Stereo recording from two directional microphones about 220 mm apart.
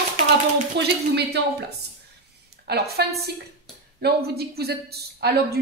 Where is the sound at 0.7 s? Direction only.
50° right (ahead or behind).